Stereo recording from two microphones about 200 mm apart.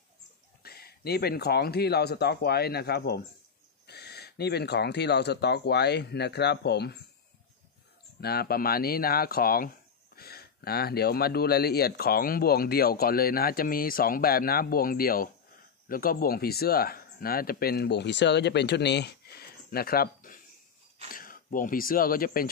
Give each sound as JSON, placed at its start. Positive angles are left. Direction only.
{"t": 0.6, "sound": "speech", "side_deg": 50}
{"t": 8.2, "sound": "speech", "side_deg": 50}
{"t": 19.7, "sound": "a sound", "side_deg": 50}
{"t": 21.1, "sound": "speech", "side_deg": 45}